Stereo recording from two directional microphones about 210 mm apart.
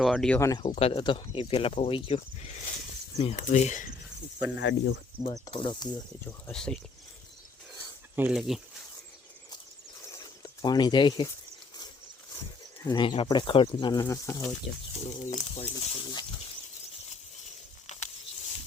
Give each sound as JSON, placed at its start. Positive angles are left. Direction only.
{"t": 0.0, "sound": "speech", "side_deg": 0}
{"t": 0.3, "sound": "speech", "side_deg": 15}
{"t": 0.6, "sound": "speech", "side_deg": 30}
{"t": 4.4, "sound": "speech", "side_deg": 60}
{"t": 5.2, "sound": "speech", "side_deg": 25}
{"t": 6.2, "sound": "speech", "side_deg": 5}
{"t": 8.1, "sound": "speech", "side_deg": -5}
{"t": 10.1, "sound": "a sound", "side_deg": 20}
{"t": 12.8, "sound": "speech", "side_deg": 20}
{"t": 14.9, "sound": "speech", "side_deg": 30}